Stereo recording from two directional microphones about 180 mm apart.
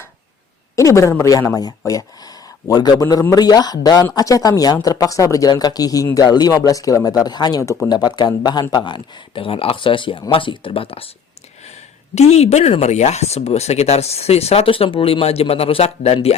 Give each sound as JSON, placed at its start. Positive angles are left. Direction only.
{"t": 0.8, "sound": "speech", "side_deg": 15}